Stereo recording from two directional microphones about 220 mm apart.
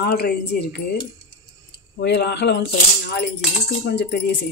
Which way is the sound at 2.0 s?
50° left (ahead or behind).